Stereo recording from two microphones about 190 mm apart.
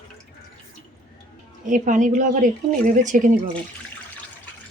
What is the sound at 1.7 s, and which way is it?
Speech, 40° right (ahead or behind).